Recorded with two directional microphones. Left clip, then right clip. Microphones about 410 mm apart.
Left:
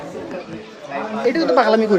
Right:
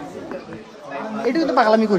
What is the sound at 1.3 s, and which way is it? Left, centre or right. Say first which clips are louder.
Speech: left 1 dB; centre.